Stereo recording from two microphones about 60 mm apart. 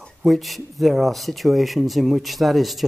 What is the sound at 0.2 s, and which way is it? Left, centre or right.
Speech, centre.